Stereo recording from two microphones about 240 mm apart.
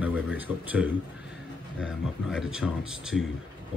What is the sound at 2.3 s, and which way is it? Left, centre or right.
Speech, centre.